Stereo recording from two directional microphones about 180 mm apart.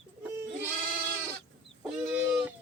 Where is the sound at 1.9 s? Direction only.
5° right (ahead or behind).